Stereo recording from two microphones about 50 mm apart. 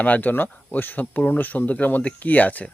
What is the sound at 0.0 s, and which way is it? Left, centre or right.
Speech, left.